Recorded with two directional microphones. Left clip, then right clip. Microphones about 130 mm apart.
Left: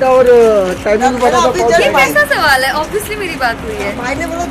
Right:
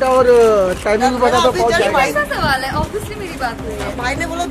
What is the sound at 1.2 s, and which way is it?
Speech, 55° right (ahead or behind).